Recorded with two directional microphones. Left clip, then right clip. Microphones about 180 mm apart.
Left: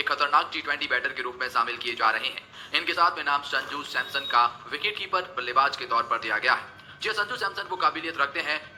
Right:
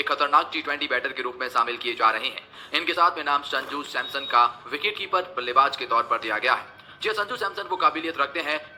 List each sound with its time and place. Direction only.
0.0 s a man's voice: 40° right (ahead or behind)